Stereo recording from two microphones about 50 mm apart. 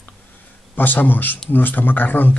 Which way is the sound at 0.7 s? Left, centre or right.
Left.